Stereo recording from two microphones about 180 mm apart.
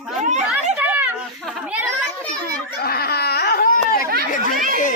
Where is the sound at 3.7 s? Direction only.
55° left (ahead or behind).